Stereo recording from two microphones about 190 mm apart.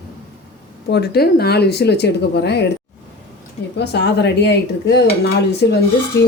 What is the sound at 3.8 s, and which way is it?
Dishes, 65° left (ahead or behind).